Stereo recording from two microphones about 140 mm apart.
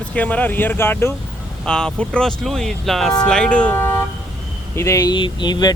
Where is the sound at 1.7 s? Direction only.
5° left (ahead or behind); by 5.7 s 30° left (ahead or behind).